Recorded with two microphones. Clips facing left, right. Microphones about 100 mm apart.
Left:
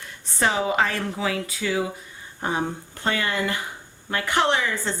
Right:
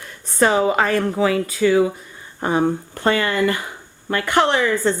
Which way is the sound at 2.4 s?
60° right (ahead or behind).